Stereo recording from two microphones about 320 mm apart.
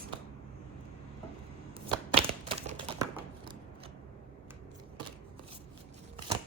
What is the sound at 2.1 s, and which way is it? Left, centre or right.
Crumpling, centre.